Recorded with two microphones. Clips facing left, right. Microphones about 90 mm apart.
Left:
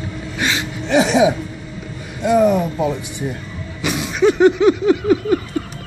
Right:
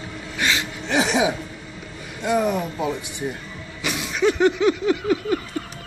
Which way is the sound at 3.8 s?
25° left (ahead or behind).